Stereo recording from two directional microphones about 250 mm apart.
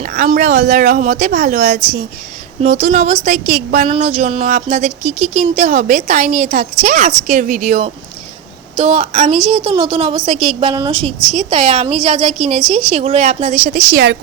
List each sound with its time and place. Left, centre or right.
0.0 s speech: right
11.2 s speech: centre
11.4 s speech: right